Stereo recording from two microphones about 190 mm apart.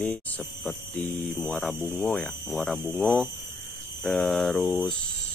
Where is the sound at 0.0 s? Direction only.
5° left (ahead or behind).